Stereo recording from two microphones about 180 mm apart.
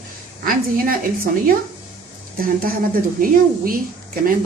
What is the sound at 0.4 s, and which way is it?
Speech, 50° right (ahead or behind).